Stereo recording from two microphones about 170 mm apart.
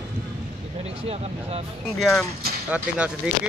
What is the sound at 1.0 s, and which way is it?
Speech, 35° right (ahead or behind).